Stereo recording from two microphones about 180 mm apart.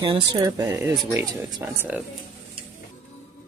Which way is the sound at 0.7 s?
15° right (ahead or behind).